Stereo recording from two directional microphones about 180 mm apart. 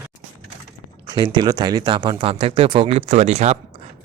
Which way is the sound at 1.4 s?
25° right (ahead or behind).